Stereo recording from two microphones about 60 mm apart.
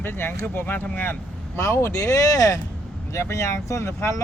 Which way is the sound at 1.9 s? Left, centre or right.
Left.